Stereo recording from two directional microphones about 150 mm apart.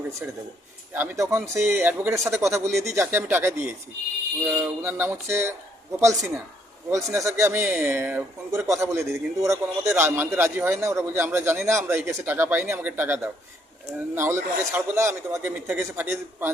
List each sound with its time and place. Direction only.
0.2 s a man's voice: 10° right (ahead or behind)